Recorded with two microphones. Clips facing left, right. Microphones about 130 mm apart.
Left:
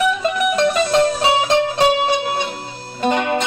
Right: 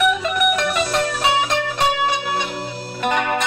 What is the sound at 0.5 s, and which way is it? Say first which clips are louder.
Music: left 5 dB; 30° left (ahead or behind).